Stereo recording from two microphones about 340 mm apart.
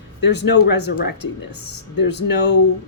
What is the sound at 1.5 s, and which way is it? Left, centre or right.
Speech, left.